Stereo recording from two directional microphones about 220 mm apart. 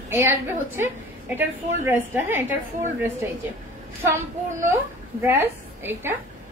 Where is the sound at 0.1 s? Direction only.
10° right (ahead or behind).